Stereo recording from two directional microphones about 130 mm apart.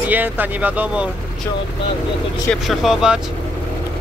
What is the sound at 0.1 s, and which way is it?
Speech, 15° right (ahead or behind).